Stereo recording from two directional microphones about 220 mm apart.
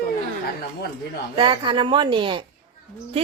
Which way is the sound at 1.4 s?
20° right (ahead or behind).